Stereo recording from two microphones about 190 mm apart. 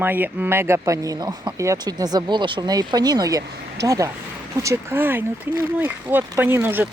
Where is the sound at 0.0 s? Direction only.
10° right (ahead or behind).